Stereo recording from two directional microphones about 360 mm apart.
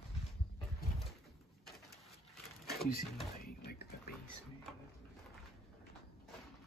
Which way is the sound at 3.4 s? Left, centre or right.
Left.